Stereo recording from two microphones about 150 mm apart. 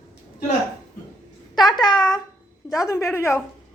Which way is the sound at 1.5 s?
30° left (ahead or behind).